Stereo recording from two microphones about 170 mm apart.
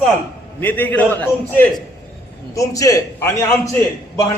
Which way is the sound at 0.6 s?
10° left (ahead or behind).